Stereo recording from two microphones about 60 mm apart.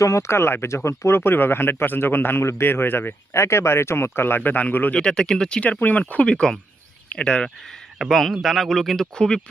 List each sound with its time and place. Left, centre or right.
0.0 s speech: left
0.9 s speech: left
1.2 s speech: left
3.3 s speech: left
4.9 s speech: centre